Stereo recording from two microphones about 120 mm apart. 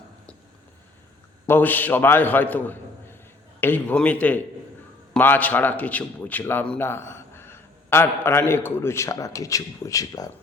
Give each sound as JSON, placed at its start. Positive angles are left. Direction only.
{"t": 1.5, "sound": "a man's voice", "side_deg": 15}